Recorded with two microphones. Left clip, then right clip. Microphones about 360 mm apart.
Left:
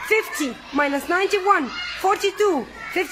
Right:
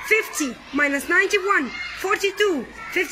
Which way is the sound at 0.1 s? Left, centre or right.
Centre.